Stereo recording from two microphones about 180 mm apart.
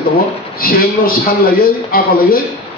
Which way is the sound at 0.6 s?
55° left (ahead or behind).